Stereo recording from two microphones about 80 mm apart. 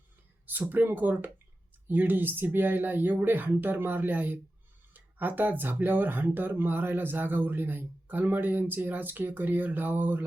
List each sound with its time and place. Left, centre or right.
0.4 s a woman's voice: right